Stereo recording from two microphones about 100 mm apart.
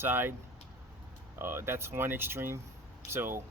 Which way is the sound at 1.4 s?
25° right (ahead or behind).